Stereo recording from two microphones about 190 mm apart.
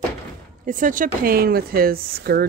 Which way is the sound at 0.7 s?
45° right (ahead or behind).